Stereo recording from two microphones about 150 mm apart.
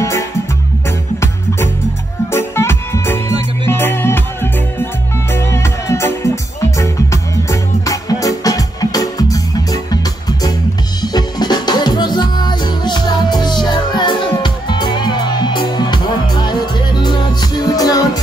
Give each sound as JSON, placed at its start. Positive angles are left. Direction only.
{"t": 2.3, "sound": "music", "side_deg": 15}
{"t": 11.0, "sound": "music", "side_deg": 25}